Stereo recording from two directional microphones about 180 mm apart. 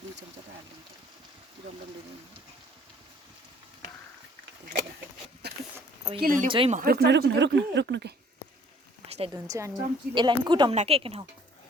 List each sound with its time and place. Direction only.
5.4 s a sound: 65° right (ahead or behind)
6.1 s speech: 50° right (ahead or behind)
6.5 s speech: 30° right (ahead or behind)
6.7 s speech: 55° right (ahead or behind); by 8.1 s 75° right (ahead or behind)
9.0 s a sound: 35° right (ahead or behind)
9.3 s a woman's voice: 15° right (ahead or behind)